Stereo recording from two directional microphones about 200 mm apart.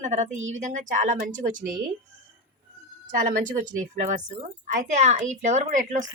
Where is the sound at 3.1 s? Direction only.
40° right (ahead or behind).